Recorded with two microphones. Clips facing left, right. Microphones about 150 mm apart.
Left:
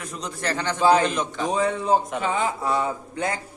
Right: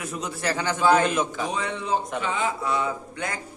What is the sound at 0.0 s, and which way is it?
A man's voice, 10° right (ahead or behind).